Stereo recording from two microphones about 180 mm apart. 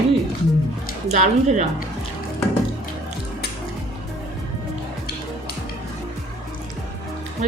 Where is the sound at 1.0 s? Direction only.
40° right (ahead or behind).